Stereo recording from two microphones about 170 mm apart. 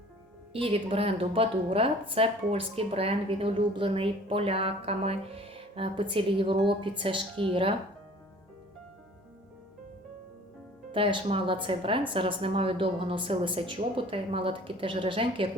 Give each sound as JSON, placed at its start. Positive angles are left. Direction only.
{"t": 0.5, "sound": "a woman's voice", "side_deg": -35}
{"t": 10.9, "sound": "a woman's voice", "side_deg": -30}